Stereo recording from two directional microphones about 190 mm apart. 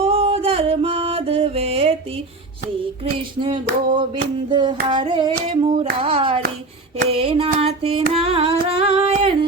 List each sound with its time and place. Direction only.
0.0 s music: 30° right (ahead or behind)
4.4 s hands: 25° right (ahead or behind)
7.1 s a sound: 30° right (ahead or behind)
8.7 s singing: 30° right (ahead or behind)